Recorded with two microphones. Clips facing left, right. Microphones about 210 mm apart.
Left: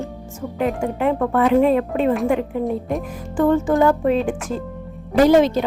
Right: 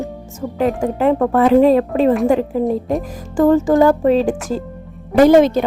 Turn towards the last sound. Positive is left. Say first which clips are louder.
# right 4 dB
turn(degrees=-50)  # may be behind; listen again after turning